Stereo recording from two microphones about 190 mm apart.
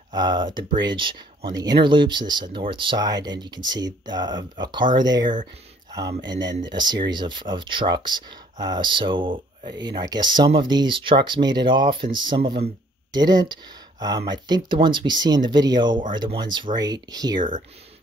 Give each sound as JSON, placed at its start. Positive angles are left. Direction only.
{"t": 0.1, "sound": "speech", "side_deg": -20}